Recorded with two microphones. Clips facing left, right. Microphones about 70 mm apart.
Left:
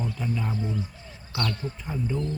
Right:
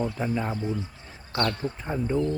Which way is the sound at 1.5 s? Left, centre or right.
Right.